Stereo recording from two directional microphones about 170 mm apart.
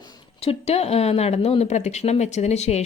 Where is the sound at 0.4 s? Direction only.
35° left (ahead or behind).